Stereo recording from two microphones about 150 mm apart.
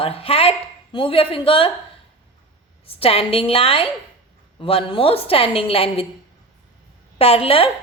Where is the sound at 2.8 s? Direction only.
40° left (ahead or behind).